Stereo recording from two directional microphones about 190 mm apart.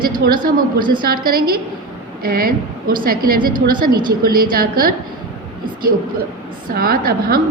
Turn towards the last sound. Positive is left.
turn(degrees=-50)  # may be behind; listen again after turning